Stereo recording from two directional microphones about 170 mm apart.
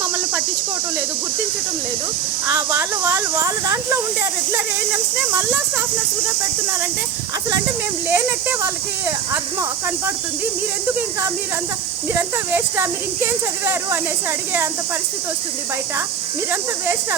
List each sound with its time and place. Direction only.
2.5 s speech: 15° right (ahead or behind)
5.3 s speech: 15° right (ahead or behind)
8.1 s speech: 15° right (ahead or behind)
12.1 s speech: 15° right (ahead or behind)
16.5 s speech: 15° right (ahead or behind)